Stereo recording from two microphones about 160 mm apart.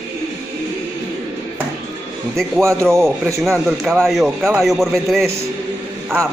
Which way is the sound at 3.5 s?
5° right (ahead or behind).